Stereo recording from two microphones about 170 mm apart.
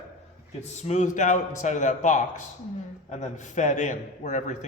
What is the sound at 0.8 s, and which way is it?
A man's voice, 45° left (ahead or behind).